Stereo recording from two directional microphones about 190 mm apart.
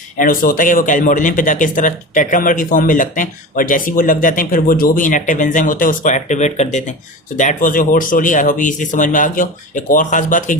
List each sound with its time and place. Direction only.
0.2 s speech: 45° left (ahead or behind)